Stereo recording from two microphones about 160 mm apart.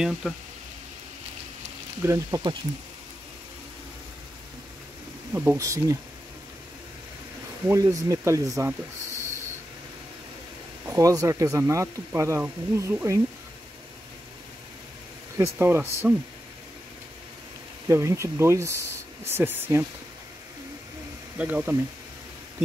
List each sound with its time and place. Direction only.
0.2 s speech: centre (ahead or behind)
2.0 s speech: 20° right (ahead or behind)
5.3 s speech: 15° right (ahead or behind)
7.6 s speech: 20° right (ahead or behind)
10.9 s speech: 20° right (ahead or behind)
15.3 s speech: 15° right (ahead or behind)
17.8 s speech: 20° right (ahead or behind)
21.4 s speech: 10° right (ahead or behind)